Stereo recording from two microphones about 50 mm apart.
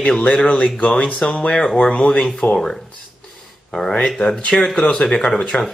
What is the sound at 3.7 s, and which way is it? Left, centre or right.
Speech, centre.